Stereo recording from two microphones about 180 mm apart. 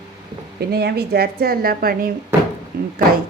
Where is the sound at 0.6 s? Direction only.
65° right (ahead or behind).